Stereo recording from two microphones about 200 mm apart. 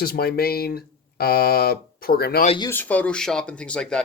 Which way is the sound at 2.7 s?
10° left (ahead or behind).